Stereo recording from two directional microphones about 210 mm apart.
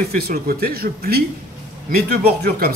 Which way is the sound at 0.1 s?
45° right (ahead or behind).